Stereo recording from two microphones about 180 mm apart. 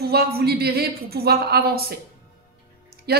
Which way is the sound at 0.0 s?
60° right (ahead or behind).